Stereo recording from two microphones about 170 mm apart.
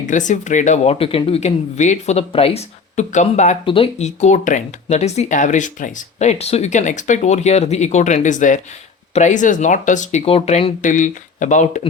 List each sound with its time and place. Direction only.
0.0 s speech: 50° left (ahead or behind)
10.8 s speech: 50° left (ahead or behind)